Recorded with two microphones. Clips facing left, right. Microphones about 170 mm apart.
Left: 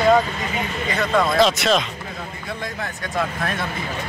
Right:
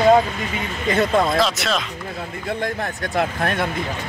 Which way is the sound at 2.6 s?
60° right (ahead or behind).